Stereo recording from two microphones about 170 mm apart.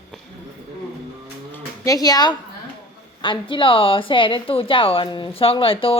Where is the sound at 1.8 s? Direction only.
20° left (ahead or behind).